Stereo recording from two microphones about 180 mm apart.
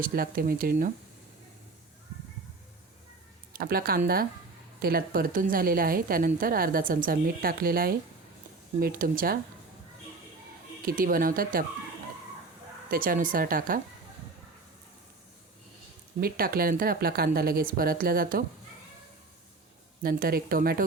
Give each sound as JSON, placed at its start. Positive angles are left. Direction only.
{"t": 0.0, "sound": "a woman's voice", "side_deg": -55}
{"t": 3.6, "sound": "a woman's voice", "side_deg": -55}
{"t": 10.8, "sound": "a woman's voice", "side_deg": -50}
{"t": 12.9, "sound": "a woman's voice", "side_deg": -50}
{"t": 16.2, "sound": "speech", "side_deg": -55}
{"t": 20.0, "sound": "speech", "side_deg": -55}